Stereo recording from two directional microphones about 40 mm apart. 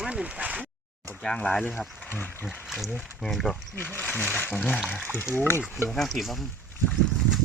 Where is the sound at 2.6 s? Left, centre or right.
Centre.